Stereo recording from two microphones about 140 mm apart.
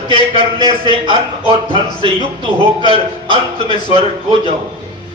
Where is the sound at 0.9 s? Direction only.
40° right (ahead or behind).